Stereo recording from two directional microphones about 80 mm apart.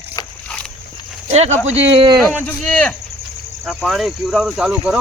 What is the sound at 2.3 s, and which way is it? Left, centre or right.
Speech, centre.